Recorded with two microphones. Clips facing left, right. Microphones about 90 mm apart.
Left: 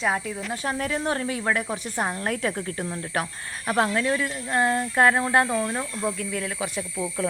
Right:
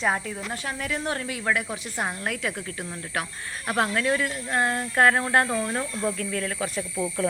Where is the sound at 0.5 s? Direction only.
35° left (ahead or behind).